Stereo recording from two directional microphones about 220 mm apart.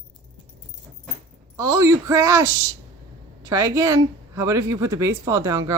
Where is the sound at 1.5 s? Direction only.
15° right (ahead or behind).